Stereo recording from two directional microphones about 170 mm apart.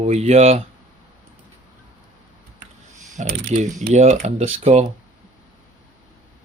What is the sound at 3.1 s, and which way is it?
Speech, 45° right (ahead or behind).